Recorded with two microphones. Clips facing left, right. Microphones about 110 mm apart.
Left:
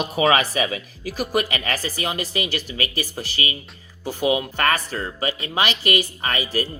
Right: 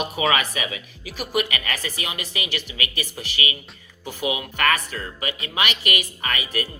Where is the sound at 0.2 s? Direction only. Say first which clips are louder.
Left 5 dB; 35° left (ahead or behind).